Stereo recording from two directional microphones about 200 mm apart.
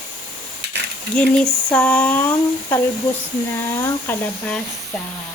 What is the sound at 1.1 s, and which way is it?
Speech, 5° left (ahead or behind).